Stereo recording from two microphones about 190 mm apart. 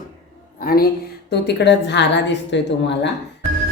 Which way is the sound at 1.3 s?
65° left (ahead or behind).